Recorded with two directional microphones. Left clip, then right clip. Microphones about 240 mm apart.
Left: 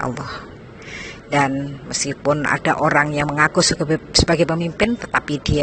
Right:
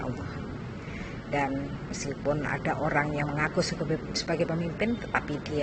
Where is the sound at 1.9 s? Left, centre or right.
Left.